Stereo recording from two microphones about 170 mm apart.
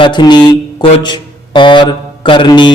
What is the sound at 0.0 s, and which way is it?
Speech, 25° left (ahead or behind).